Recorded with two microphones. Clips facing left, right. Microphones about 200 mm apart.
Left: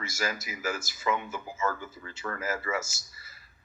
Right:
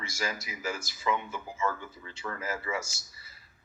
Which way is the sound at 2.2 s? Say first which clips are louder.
Left 2 dB; 5° right (ahead or behind).